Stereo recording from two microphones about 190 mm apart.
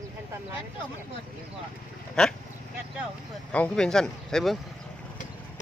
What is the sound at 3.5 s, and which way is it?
Speech, 5° left (ahead or behind).